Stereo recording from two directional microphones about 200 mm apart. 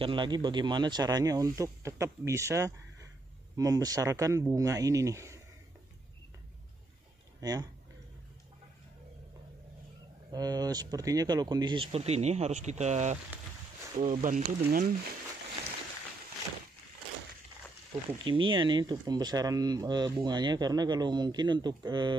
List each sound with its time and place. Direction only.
0.0 s speech: 25° right (ahead or behind)
7.3 s speech: 20° right (ahead or behind)
10.3 s speech: 20° right (ahead or behind); by 14.9 s 40° right (ahead or behind)
18.2 s speech: 25° right (ahead or behind)